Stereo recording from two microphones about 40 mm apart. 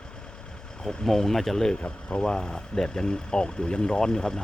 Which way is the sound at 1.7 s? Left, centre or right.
Left.